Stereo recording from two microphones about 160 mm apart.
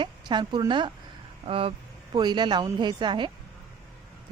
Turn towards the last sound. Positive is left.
turn(degrees=-30)  # may be behind; listen again after turning